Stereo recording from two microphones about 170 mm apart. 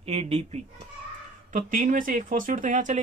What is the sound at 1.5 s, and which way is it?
Speech, 55° right (ahead or behind).